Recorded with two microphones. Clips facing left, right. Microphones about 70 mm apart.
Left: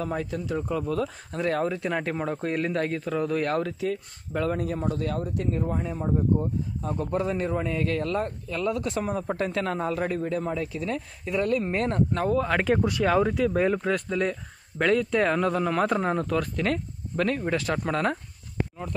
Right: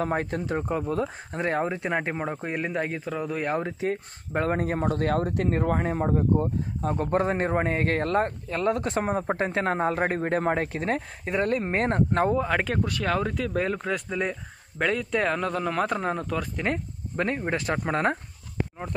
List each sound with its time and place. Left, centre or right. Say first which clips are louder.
0.0 s speech: right 3 dB; right; by 3.6 s centre
3.6 s speech: right 1 dB; right
6.3 s speech: right 1 dB; right
12.4 s speech: left 2 dB; centre
12.7 s speech: left 4 dB; centre
16.5 s speech: left 1 dB; right